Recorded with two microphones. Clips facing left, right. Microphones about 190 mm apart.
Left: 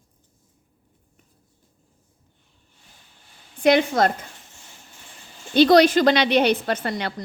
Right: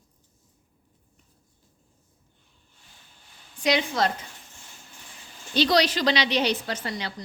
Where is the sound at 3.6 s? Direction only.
50° left (ahead or behind).